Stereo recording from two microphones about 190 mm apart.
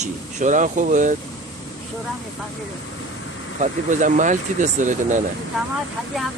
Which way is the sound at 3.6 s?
40° right (ahead or behind).